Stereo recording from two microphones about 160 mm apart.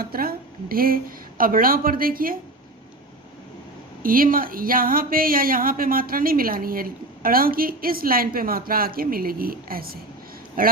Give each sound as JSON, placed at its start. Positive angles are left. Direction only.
{"t": 0.0, "sound": "speech", "side_deg": -65}
{"t": 4.0, "sound": "speech", "side_deg": -60}